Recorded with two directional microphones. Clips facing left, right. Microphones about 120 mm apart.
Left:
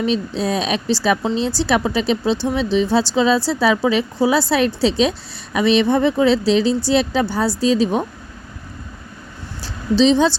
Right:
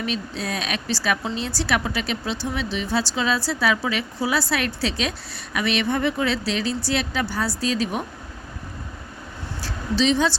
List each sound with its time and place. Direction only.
0.0 s speech: 30° left (ahead or behind)
10.0 s speech: 25° left (ahead or behind)